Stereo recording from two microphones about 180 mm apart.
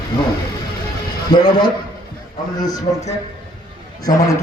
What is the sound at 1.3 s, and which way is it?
A man's voice, 25° left (ahead or behind).